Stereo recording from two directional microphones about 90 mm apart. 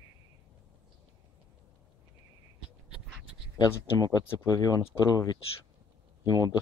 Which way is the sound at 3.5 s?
40° left (ahead or behind).